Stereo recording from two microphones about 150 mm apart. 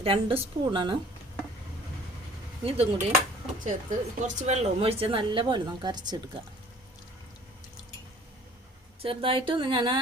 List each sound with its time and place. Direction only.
0.0 s a woman's voice: 40° right (ahead or behind)
2.6 s a woman's voice: 40° right (ahead or behind)
3.6 s a woman's voice: 60° right (ahead or behind); by 6.4 s 30° right (ahead or behind)
9.0 s a woman's voice: 40° right (ahead or behind)